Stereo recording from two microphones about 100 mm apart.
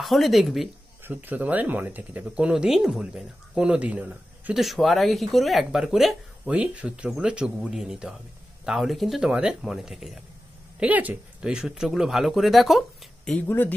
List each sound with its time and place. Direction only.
0.0 s speech: centre (ahead or behind)
1.0 s speech: 15° right (ahead or behind)
4.6 s speech: centre (ahead or behind)
6.5 s speech: 15° right (ahead or behind)
10.8 s speech: 15° right (ahead or behind); by 13.4 s centre (ahead or behind)
13.4 s speech: 20° left (ahead or behind)